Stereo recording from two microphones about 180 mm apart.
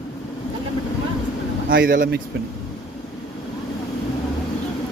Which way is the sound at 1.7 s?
55° right (ahead or behind).